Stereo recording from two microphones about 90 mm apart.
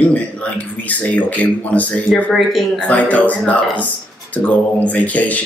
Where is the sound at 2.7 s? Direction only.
15° left (ahead or behind).